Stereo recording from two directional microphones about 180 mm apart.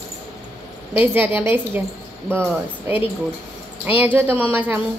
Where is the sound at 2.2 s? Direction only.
5° left (ahead or behind).